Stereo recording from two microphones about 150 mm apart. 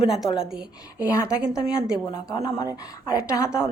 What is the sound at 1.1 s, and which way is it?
Speech, 20° left (ahead or behind).